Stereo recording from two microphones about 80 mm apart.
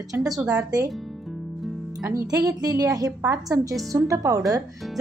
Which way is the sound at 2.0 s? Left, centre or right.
Right.